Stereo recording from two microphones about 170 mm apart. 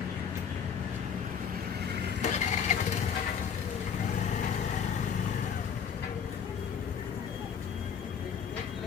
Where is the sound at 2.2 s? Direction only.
45° left (ahead or behind).